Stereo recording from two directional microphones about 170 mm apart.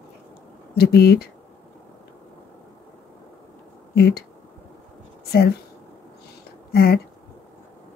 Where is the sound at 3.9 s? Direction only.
70° left (ahead or behind).